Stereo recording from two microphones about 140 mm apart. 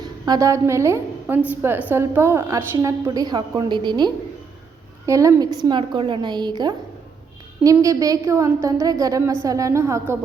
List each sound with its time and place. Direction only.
0.0 s a woman's voice: 25° right (ahead or behind)